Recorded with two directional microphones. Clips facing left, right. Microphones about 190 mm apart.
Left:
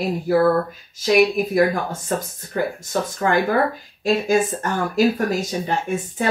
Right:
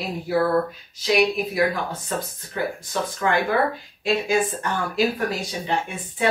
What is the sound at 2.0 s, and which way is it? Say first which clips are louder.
Speech: left 4 dB; 45° left (ahead or behind).